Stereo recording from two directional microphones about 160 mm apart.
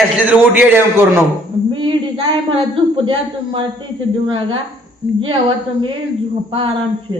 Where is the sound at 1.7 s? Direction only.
30° right (ahead or behind).